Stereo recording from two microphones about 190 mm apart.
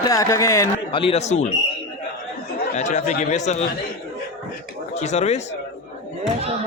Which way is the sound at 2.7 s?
40° left (ahead or behind).